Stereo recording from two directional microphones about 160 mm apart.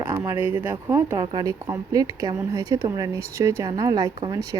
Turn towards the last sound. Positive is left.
turn(degrees=-20)  # may be behind; listen again after turning